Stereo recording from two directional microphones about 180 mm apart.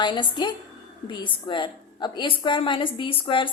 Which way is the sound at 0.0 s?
25° left (ahead or behind).